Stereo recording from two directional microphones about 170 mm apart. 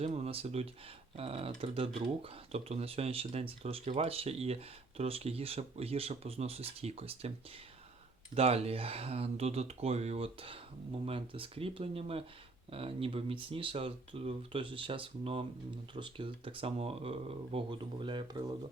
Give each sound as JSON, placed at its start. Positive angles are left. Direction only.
{"t": 0.0, "sound": "speech", "side_deg": -40}
{"t": 8.4, "sound": "speech", "side_deg": -35}